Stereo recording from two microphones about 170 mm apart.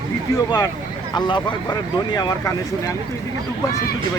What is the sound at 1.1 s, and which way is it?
Speech, 25° left (ahead or behind).